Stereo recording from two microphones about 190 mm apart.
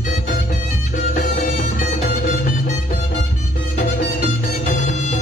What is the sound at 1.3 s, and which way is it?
Music, 40° left (ahead or behind).